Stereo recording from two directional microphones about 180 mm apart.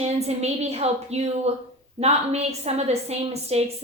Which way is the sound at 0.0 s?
35° right (ahead or behind).